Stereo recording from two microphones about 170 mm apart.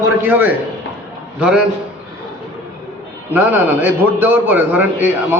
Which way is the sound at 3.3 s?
10° right (ahead or behind).